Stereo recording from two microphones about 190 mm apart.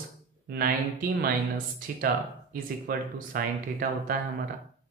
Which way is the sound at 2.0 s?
50° right (ahead or behind).